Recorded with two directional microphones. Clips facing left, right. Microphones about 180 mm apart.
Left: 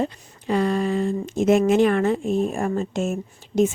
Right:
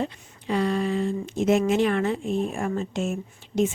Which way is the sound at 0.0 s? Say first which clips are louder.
Left 4 dB; 45° left (ahead or behind).